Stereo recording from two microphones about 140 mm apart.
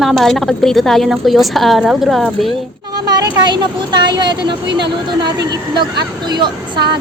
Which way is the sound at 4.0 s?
30° right (ahead or behind).